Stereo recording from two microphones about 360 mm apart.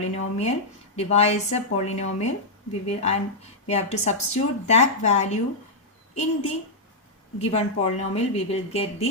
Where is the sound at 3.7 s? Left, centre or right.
Centre.